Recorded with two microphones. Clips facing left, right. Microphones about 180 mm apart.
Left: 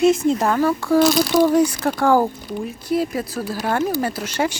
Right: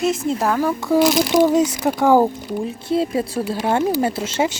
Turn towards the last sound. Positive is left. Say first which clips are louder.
# right 2 dB
turn(degrees=-25)  # may be behind; listen again after turning